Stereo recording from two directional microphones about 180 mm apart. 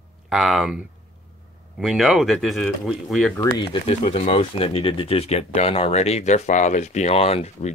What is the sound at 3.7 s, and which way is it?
Speech, 35° left (ahead or behind).